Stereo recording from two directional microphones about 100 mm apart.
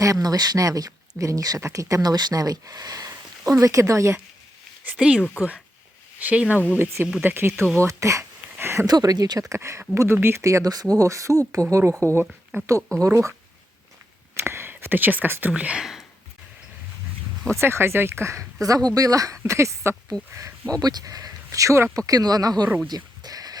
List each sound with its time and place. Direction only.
0.0 s speech: 35° right (ahead or behind)
4.9 s speech: 10° right (ahead or behind)
7.8 s a sound: 30° right (ahead or behind)
8.9 s speech: 40° right (ahead or behind)
12.2 s speech: 10° right (ahead or behind)
13.0 s speech: 30° right (ahead or behind)
14.3 s speech: 25° right (ahead or behind); by 16.0 s 5° right (ahead or behind)
17.6 s speech: 25° right (ahead or behind)
20.7 s speech: 40° right (ahead or behind)
22.9 s sheep: 40° right (ahead or behind)